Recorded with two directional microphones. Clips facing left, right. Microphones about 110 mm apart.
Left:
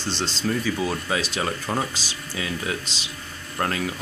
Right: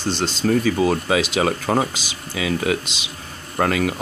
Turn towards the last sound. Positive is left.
turn(degrees=-70)  # may be behind; listen again after turning